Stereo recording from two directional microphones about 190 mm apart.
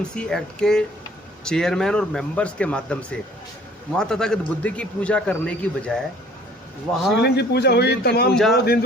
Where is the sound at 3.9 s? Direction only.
5° left (ahead or behind).